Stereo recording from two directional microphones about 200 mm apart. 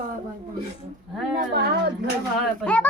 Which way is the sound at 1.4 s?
55° right (ahead or behind).